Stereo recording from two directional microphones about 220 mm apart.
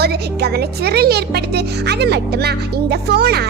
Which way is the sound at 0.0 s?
45° right (ahead or behind).